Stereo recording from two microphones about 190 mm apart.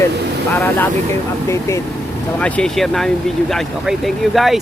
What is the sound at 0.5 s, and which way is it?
Speech, 10° left (ahead or behind).